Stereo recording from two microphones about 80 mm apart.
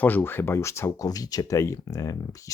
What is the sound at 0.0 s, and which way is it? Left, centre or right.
Speech, left.